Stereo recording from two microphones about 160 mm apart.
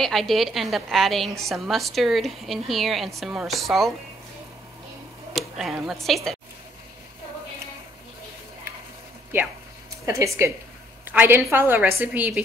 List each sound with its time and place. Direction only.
0.0 s a woman's voice: centre (ahead or behind)
5.3 s speech: centre (ahead or behind)
10.0 s a woman's voice: 20° right (ahead or behind)